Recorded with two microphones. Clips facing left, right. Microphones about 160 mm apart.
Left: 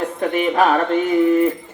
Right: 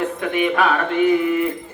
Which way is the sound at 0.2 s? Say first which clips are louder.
Left 4 dB; 40° left (ahead or behind).